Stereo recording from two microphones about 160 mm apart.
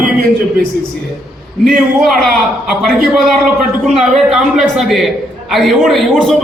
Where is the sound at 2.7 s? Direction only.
Centre (ahead or behind).